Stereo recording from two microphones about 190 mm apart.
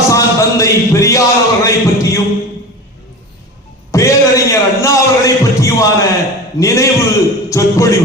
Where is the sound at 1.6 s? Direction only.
15° left (ahead or behind).